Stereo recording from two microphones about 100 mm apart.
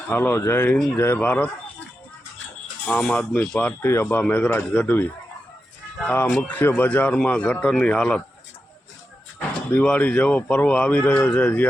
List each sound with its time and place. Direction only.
0.1 s speech: 20° left (ahead or behind)
2.8 s speech: 10° left (ahead or behind)
9.6 s speech: 10° left (ahead or behind)